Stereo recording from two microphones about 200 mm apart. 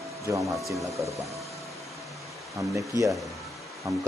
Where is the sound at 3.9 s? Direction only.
15° right (ahead or behind).